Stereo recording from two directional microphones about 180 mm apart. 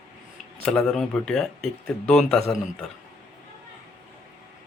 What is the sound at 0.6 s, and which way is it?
Speech, centre (ahead or behind).